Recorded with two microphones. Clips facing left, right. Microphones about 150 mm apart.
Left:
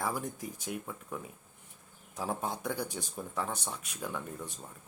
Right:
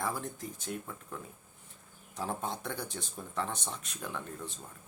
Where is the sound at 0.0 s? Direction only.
15° left (ahead or behind).